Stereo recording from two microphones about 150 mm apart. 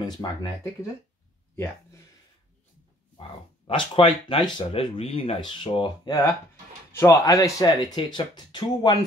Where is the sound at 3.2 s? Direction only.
45° left (ahead or behind).